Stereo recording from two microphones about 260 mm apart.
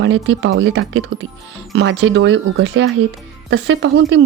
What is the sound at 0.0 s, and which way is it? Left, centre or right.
Speech, right.